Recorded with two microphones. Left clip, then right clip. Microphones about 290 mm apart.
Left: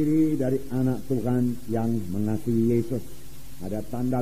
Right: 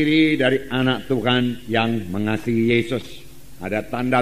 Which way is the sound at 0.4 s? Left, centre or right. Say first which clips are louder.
Right 7 dB; right.